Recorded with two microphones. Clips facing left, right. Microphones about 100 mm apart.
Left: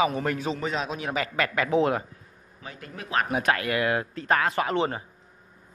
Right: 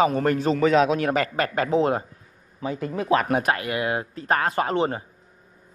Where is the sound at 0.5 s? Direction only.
75° right (ahead or behind); by 1.6 s 40° right (ahead or behind).